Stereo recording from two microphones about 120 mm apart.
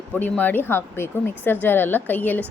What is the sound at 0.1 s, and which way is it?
A woman's voice, 15° left (ahead or behind).